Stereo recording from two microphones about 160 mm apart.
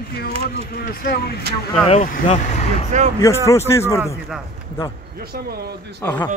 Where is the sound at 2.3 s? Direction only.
45° left (ahead or behind).